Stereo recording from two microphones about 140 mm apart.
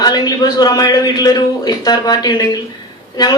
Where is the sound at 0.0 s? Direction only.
30° left (ahead or behind).